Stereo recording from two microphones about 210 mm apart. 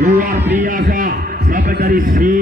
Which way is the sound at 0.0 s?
40° right (ahead or behind).